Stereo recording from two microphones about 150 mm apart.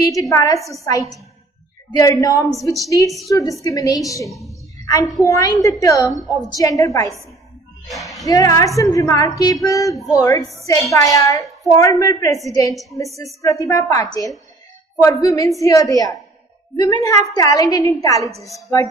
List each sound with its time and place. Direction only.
0.1 s a woman's voice: 20° left (ahead or behind)
4.5 s music: 25° left (ahead or behind)
5.2 s a woman's voice: 25° left (ahead or behind)
7.9 s speech: centre (ahead or behind)
8.3 s a woman's voice: 20° left (ahead or behind)